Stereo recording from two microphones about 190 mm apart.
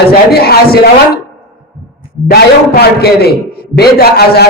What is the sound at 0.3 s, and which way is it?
Speech, 55° left (ahead or behind).